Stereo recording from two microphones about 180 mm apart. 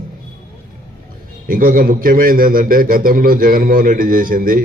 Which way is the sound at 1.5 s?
50° right (ahead or behind).